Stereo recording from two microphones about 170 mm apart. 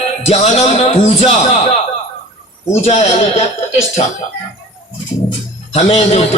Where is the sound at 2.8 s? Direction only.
40° left (ahead or behind).